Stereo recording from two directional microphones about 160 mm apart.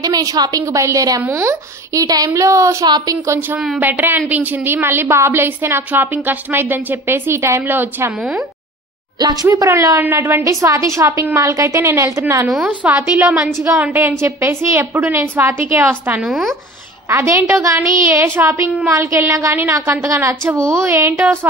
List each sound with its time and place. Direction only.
0.0 s a woman's voice: 25° right (ahead or behind); by 8.5 s 5° right (ahead or behind)
9.2 s a woman's voice: 25° right (ahead or behind)
12.4 s a woman's voice: 5° right (ahead or behind)
17.1 s a woman's voice: 15° right (ahead or behind)